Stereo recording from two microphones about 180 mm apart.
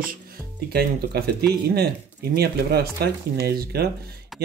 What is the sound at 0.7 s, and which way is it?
Speech, 60° right (ahead or behind).